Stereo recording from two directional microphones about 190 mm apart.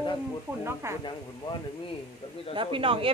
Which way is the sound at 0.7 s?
15° right (ahead or behind).